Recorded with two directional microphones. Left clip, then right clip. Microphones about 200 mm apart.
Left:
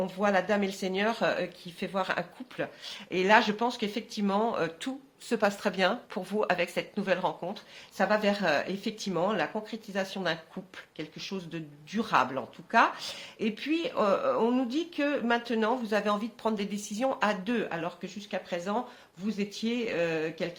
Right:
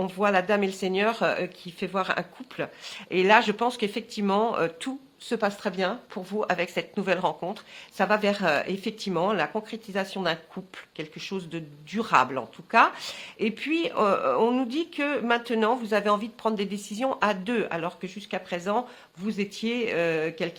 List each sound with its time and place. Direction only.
0.0 s a woman's voice: 35° right (ahead or behind)
5.3 s a woman's voice: 15° right (ahead or behind); by 20.5 s 40° right (ahead or behind)